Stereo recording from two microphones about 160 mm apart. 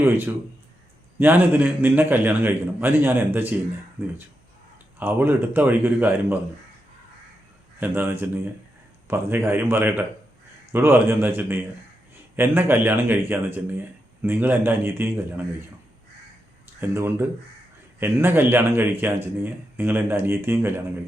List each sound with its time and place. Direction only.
1.2 s speech: 10° right (ahead or behind)
4.9 s speech: 10° right (ahead or behind)
7.8 s speech: 10° right (ahead or behind)
16.8 s speech: 15° right (ahead or behind)